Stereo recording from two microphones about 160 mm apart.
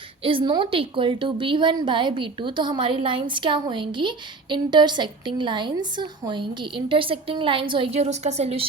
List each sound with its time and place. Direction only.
0.2 s a woman's voice: 35° right (ahead or behind)